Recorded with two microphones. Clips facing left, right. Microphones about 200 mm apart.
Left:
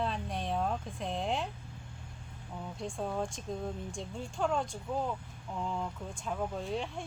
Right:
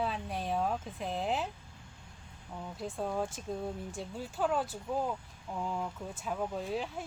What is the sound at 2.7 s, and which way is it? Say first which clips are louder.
Speech: right 1 dB; 5° right (ahead or behind).